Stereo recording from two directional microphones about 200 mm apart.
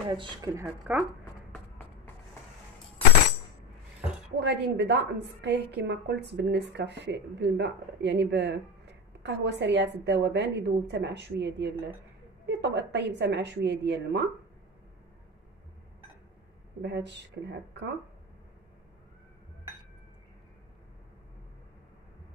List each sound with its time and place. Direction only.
0.1 s speech: 20° right (ahead or behind)
4.4 s a woman's voice: 60° right (ahead or behind)
16.8 s a woman's voice: 60° right (ahead or behind)